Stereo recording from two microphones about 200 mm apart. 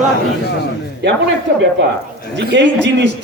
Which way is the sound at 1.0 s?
60° right (ahead or behind).